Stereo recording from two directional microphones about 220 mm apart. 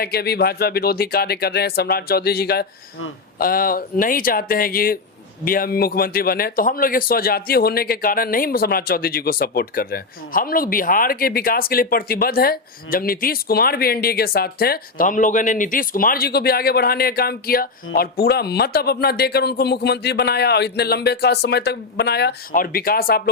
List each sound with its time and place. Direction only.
0.0 s a man's voice: 45° left (ahead or behind)